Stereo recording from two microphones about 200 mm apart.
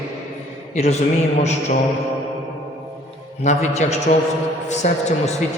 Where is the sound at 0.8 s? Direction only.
35° left (ahead or behind).